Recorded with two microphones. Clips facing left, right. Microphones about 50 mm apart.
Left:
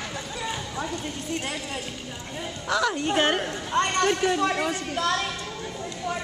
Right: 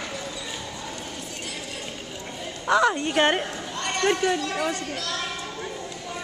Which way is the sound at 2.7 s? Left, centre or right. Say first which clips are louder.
Right 5 dB; centre.